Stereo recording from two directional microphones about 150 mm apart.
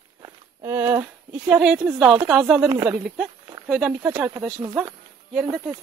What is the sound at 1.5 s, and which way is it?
Speech, centre (ahead or behind).